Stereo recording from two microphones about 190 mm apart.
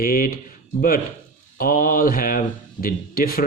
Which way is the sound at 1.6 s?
50° left (ahead or behind).